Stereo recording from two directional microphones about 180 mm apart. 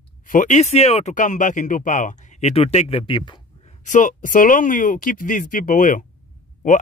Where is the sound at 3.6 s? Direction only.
45° left (ahead or behind).